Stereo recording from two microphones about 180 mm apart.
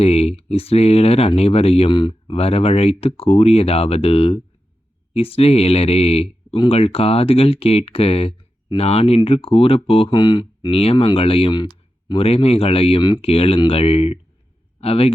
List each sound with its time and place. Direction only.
0.0 s a man's voice: 35° left (ahead or behind)